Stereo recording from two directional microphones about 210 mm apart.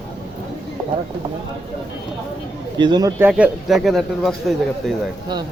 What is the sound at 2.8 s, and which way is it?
Speech, 20° right (ahead or behind).